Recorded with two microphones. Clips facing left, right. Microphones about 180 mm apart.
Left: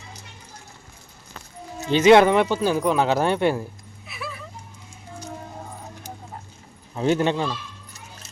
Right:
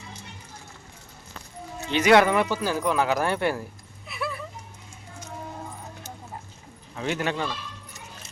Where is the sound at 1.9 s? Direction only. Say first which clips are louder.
Left 5 dB; 25° left (ahead or behind).